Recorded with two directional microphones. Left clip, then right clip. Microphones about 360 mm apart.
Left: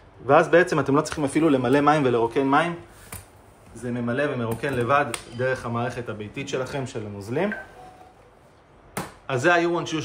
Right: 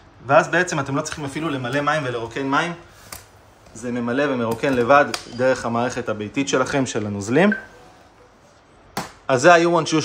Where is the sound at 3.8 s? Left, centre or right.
Centre; by 7.5 s right.